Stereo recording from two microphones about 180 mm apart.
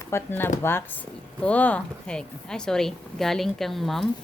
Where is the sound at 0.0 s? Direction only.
15° left (ahead or behind).